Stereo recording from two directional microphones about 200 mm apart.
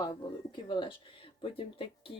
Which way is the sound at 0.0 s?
25° left (ahead or behind).